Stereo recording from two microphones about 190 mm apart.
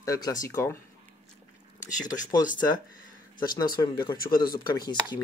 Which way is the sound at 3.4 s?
20° left (ahead or behind).